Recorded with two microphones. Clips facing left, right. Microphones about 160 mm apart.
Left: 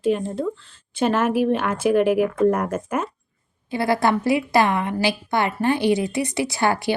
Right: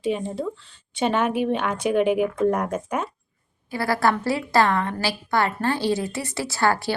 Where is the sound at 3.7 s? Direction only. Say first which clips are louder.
Left 2 dB; 20° left (ahead or behind).